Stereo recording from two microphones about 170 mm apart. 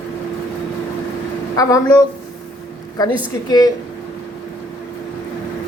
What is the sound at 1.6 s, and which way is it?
Speech, 20° left (ahead or behind).